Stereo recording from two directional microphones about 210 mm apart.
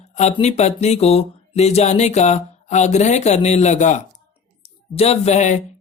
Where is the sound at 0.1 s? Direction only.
30° left (ahead or behind).